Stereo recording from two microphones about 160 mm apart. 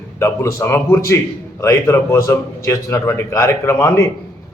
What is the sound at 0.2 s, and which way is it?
A man's voice, 15° left (ahead or behind).